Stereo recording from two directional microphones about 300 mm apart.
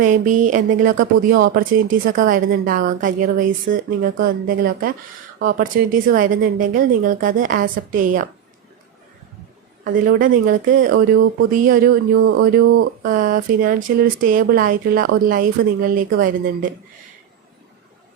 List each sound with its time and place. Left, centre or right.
0.0 s speech: right
9.8 s speech: right
12.1 s speech: right